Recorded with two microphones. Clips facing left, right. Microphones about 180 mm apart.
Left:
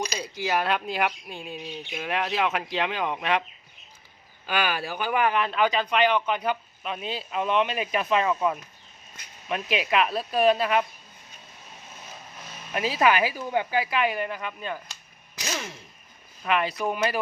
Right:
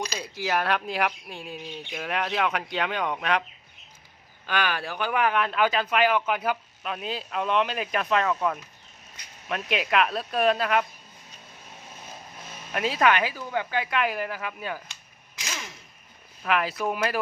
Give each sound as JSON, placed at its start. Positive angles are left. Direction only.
{"t": 0.2, "sound": "speech", "side_deg": 0}
{"t": 4.4, "sound": "speech", "side_deg": 5}
{"t": 12.7, "sound": "speech", "side_deg": 0}
{"t": 15.4, "sound": "a sound", "side_deg": 35}
{"t": 16.4, "sound": "speech", "side_deg": 0}